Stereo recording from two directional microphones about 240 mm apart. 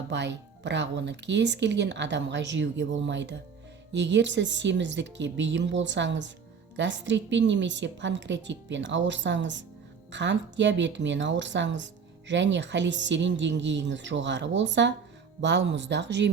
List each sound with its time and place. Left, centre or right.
0.1 s speech: right